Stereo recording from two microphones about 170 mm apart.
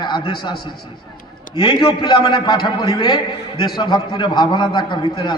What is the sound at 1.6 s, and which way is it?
A man's voice, 25° left (ahead or behind).